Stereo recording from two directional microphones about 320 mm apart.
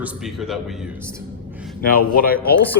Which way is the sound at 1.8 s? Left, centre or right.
Left.